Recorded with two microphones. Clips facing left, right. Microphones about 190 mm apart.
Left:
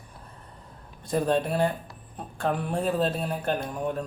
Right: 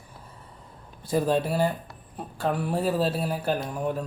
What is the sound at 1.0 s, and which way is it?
Speech, 5° right (ahead or behind).